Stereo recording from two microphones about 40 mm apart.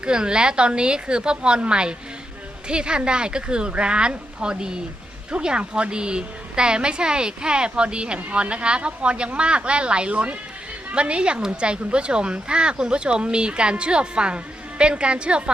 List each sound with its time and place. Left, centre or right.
0.0 s a woman's voice: right